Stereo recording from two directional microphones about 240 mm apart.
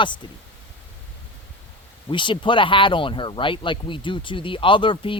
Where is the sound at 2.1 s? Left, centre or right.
Centre.